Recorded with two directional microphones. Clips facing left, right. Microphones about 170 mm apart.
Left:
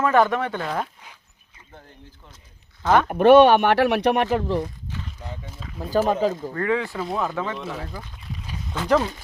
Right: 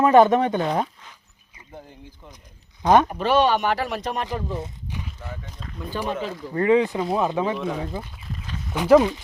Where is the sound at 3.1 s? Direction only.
55° left (ahead or behind); by 4.6 s 75° left (ahead or behind).